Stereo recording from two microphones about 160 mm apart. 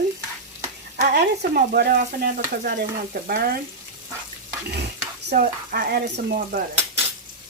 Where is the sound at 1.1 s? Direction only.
80° right.